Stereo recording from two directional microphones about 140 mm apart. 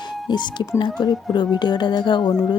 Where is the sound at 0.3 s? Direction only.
30° left (ahead or behind).